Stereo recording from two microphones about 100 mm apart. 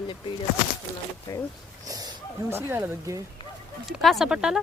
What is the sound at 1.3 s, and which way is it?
Speech, 30° left (ahead or behind).